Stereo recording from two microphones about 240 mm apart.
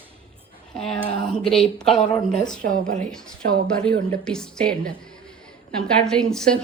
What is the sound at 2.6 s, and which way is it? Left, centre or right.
Speech, right.